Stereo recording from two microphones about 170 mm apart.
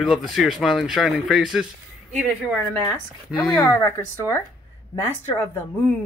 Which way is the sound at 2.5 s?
10° left (ahead or behind).